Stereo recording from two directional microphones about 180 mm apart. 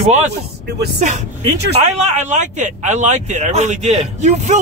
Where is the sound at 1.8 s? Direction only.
35° right (ahead or behind).